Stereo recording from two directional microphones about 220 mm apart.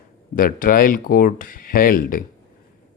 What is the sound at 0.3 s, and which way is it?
Speech, 40° left (ahead or behind).